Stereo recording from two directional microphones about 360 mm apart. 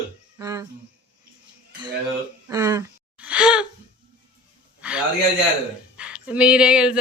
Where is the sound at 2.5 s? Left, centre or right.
Centre.